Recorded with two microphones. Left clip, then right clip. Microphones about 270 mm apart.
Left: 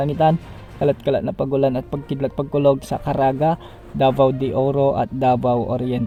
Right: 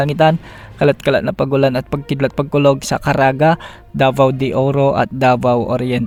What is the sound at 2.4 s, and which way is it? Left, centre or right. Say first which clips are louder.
Speech: right 4 dB; right.